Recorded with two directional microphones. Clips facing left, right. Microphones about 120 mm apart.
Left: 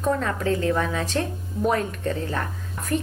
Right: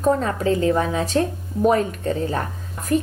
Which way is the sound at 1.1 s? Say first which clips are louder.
Right 5 dB; 15° right (ahead or behind).